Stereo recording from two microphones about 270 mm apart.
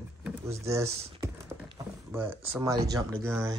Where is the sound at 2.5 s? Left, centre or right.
Centre.